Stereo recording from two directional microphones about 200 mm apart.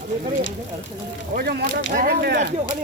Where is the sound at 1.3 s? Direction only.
45° right (ahead or behind).